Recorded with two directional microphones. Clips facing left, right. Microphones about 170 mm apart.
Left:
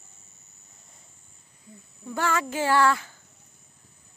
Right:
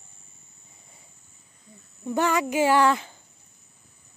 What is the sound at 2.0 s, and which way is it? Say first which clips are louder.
Speech: right 4 dB; 20° right (ahead or behind).